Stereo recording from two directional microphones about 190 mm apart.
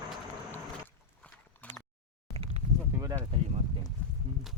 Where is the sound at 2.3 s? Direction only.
30° right (ahead or behind).